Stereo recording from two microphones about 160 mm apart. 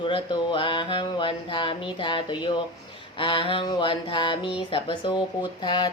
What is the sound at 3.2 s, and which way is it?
A woman's voice, 35° left (ahead or behind).